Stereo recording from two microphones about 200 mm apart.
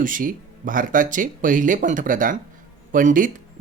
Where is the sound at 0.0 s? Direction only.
45° right (ahead or behind).